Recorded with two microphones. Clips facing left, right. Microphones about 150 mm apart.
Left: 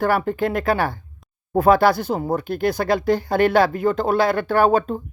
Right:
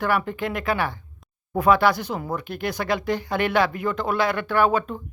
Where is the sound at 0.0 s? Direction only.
35° left (ahead or behind).